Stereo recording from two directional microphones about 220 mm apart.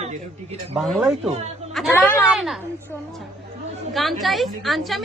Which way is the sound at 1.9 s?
10° left (ahead or behind).